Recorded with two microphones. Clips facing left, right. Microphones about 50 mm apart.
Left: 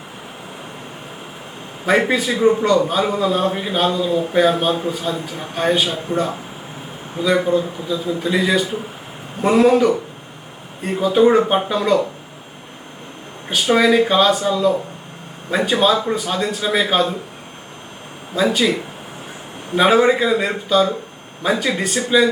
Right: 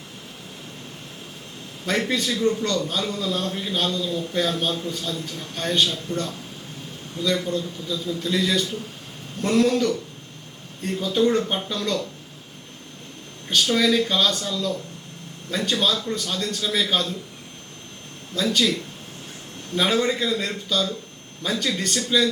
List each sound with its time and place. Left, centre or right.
1.8 s a man's voice: centre
13.5 s a man's voice: centre
18.3 s a man's voice: centre